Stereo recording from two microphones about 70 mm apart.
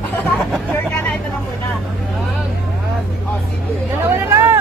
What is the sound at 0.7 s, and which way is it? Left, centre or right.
Speech, left.